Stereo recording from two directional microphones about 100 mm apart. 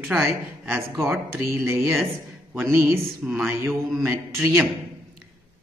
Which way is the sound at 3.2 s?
5° right (ahead or behind).